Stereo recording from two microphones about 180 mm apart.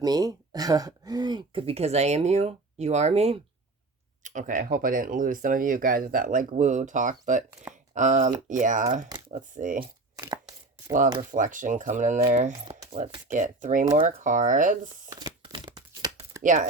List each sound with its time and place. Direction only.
0.0 s speech: 20° right (ahead or behind); by 7.4 s 45° right (ahead or behind)
7.7 s a sound: 45° right (ahead or behind)
8.4 s speech: 45° right (ahead or behind)
9.0 s typing: 25° right (ahead or behind)
9.6 s speech: 45° right (ahead or behind)
10.2 s chopping: 20° right (ahead or behind)
11.2 s speech: 45° right (ahead or behind)
15.1 s tearing: 20° right (ahead or behind)
16.4 s speech: 45° right (ahead or behind)